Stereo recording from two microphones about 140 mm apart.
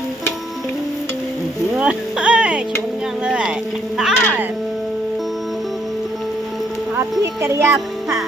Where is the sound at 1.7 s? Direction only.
5° right (ahead or behind).